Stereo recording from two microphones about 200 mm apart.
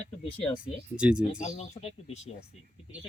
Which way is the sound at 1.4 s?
35° left (ahead or behind).